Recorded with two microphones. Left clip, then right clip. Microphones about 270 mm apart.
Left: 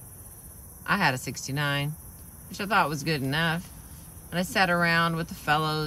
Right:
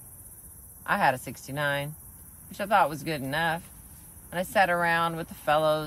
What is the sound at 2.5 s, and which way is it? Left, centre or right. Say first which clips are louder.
Speech: right 1 dB; centre.